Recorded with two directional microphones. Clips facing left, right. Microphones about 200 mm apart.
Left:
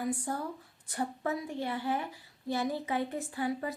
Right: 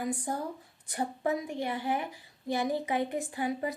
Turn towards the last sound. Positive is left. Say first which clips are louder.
# right 1 dB
turn(degrees=-20)  # may be behind; listen again after turning